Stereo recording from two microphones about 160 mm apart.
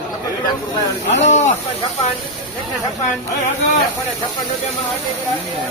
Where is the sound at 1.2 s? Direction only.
45° left (ahead or behind).